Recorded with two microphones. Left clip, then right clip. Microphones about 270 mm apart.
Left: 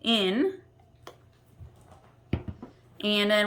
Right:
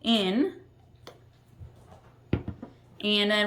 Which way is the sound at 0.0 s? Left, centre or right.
Centre.